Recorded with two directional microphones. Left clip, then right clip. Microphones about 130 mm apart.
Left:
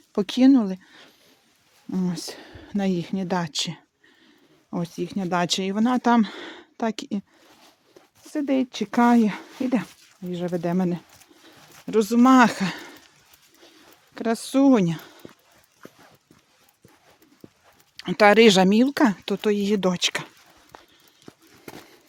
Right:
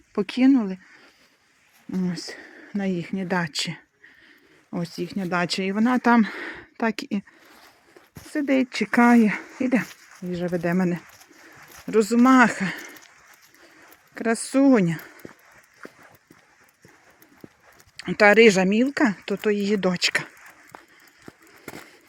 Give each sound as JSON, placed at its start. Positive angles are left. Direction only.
{"t": 0.1, "sound": "speech", "side_deg": 25}
{"t": 1.9, "sound": "speech", "side_deg": 25}
{"t": 3.2, "sound": "speech", "side_deg": 10}
{"t": 4.9, "sound": "speech", "side_deg": 20}
{"t": 8.3, "sound": "speech", "side_deg": 0}
{"t": 14.1, "sound": "speech", "side_deg": 5}
{"t": 17.9, "sound": "speech", "side_deg": 15}
{"t": 18.4, "sound": "speech", "side_deg": 35}
{"t": 20.0, "sound": "speech", "side_deg": 10}
{"t": 20.7, "sound": "run", "side_deg": -10}
{"t": 21.2, "sound": "a sound", "side_deg": -20}